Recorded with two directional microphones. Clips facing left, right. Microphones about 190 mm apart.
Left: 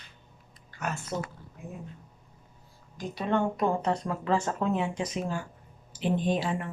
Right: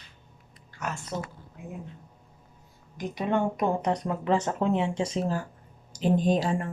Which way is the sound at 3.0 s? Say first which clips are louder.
Right 1 dB; 15° right (ahead or behind).